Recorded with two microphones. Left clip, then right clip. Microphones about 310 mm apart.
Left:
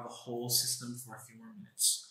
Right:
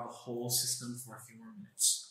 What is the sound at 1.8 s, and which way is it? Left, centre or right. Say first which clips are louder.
Speech: even; centre.